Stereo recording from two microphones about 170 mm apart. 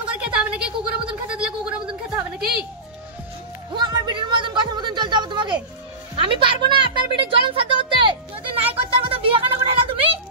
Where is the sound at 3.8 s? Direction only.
25° right (ahead or behind).